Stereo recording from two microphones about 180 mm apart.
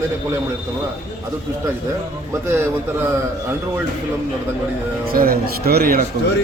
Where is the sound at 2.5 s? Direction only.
10° right (ahead or behind).